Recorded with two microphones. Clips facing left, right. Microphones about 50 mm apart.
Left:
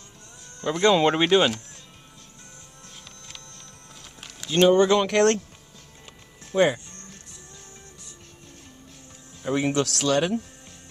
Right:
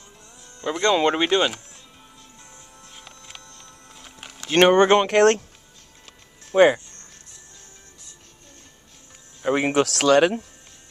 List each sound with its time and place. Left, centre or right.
0.7 s speech: centre
4.5 s speech: right
4.8 s speech: right
6.5 s speech: right
9.4 s speech: right